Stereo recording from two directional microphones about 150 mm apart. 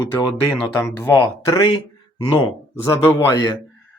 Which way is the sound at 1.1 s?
30° left (ahead or behind).